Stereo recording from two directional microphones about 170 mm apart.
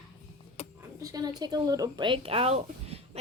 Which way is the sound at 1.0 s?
20° right (ahead or behind).